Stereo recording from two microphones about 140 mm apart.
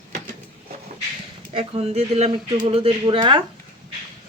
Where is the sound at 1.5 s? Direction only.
45° right (ahead or behind).